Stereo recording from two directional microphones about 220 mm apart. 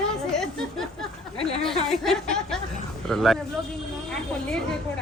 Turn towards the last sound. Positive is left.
turn(degrees=0)  # may be behind; listen again after turning